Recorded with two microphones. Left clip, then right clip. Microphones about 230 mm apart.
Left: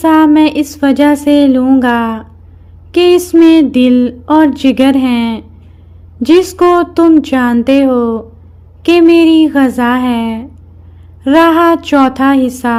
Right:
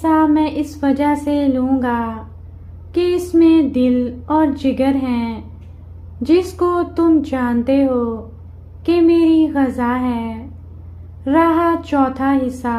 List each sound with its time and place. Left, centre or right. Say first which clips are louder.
0.0 s speech: left 7 dB; left